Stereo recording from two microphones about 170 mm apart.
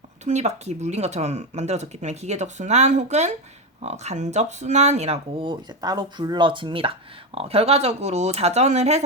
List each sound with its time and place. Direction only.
0.3 s speech: 40° right (ahead or behind)